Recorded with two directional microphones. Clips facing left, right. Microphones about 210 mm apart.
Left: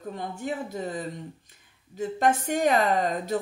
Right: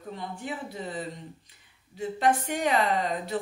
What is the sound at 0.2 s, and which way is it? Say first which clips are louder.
A woman's voice: left 4 dB; 45° left (ahead or behind).